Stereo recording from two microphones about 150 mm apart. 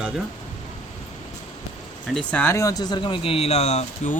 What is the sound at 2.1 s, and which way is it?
Speech, 10° left (ahead or behind).